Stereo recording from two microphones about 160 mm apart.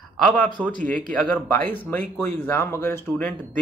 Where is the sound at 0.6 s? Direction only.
20° right (ahead or behind).